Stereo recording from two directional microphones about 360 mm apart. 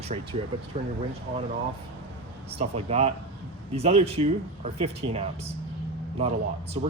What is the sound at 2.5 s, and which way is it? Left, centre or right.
Speech, centre.